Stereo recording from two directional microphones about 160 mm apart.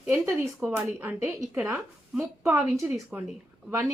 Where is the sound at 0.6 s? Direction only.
15° right (ahead or behind).